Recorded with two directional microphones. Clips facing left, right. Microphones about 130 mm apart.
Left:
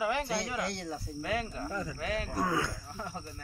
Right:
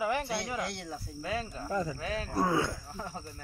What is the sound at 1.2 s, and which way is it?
Speech, 30° right (ahead or behind).